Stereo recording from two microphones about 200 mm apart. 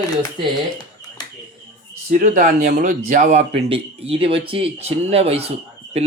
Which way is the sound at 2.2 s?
45° right (ahead or behind).